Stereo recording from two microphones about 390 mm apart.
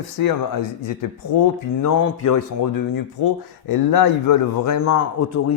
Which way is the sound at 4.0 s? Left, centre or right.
Left.